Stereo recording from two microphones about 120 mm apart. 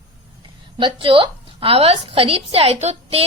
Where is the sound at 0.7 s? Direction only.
45° right (ahead or behind).